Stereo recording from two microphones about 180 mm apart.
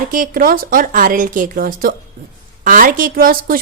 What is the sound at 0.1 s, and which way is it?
A woman's voice, 50° right (ahead or behind).